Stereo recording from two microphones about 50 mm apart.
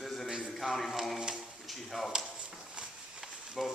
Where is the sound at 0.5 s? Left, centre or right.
Centre.